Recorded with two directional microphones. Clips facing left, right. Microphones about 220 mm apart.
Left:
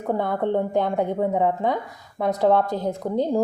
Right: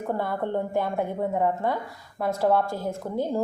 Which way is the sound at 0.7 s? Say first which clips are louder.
Left 4 dB; 20° left (ahead or behind).